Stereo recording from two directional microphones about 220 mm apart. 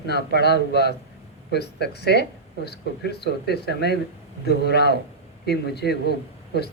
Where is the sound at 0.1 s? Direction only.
50° left (ahead or behind).